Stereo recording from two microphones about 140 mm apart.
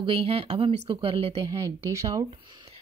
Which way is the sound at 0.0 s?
40° right (ahead or behind).